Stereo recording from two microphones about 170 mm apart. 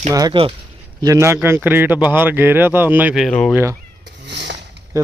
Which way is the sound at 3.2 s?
Centre (ahead or behind).